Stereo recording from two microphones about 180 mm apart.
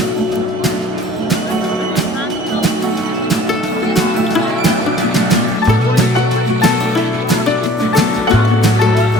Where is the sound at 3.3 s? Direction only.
Centre (ahead or behind).